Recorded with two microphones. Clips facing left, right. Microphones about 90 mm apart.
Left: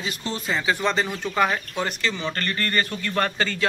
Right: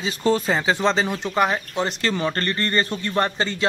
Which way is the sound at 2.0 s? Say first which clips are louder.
Right 4 dB; 45° right (ahead or behind).